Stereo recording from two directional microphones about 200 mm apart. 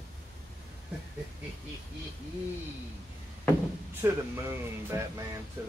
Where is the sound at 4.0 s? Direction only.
15° right (ahead or behind).